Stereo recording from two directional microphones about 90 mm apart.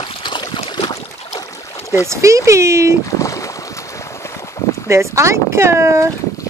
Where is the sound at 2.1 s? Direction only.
35° right (ahead or behind).